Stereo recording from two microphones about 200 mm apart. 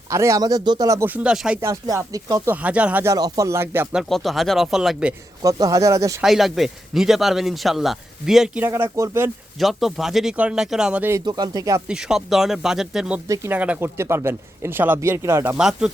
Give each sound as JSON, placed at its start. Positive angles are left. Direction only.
{"t": 0.1, "sound": "speech", "side_deg": -15}
{"t": 1.6, "sound": "speech", "side_deg": -15}
{"t": 4.1, "sound": "speech", "side_deg": 0}
{"t": 5.4, "sound": "speech", "side_deg": -20}
{"t": 6.2, "sound": "speech", "side_deg": 0}
{"t": 9.6, "sound": "speech", "side_deg": 0}
{"t": 11.3, "sound": "speech", "side_deg": -20}
{"t": 11.9, "sound": "speech", "side_deg": -5}
{"t": 13.2, "sound": "speech", "side_deg": -15}